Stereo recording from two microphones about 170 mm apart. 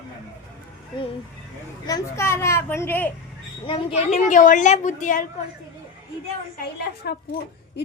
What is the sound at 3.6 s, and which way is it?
Speech, 35° left (ahead or behind).